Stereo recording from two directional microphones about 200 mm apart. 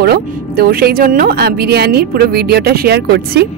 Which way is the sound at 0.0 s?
50° right (ahead or behind).